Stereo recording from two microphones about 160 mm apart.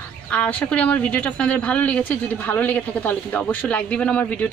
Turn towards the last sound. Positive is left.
turn(degrees=10)  # may be behind; listen again after turning